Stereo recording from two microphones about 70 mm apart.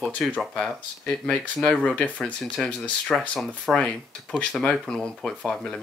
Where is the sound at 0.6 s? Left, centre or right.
Centre.